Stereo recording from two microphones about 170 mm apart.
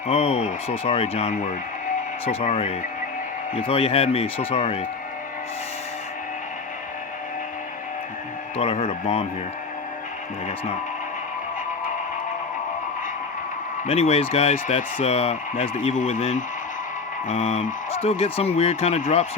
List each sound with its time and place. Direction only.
0.1 s speech: 35° left (ahead or behind)
8.5 s speech: 40° left (ahead or behind)
13.8 s speech: 35° left (ahead or behind)